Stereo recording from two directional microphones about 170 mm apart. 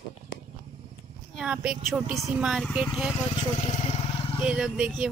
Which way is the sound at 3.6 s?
35° left (ahead or behind).